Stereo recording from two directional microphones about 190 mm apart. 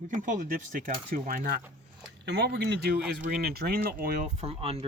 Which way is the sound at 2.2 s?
60° right (ahead or behind).